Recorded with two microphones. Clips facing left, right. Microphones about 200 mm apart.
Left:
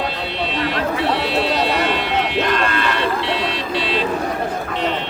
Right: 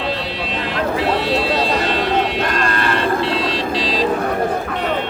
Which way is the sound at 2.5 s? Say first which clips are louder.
Even; 50° right (ahead or behind).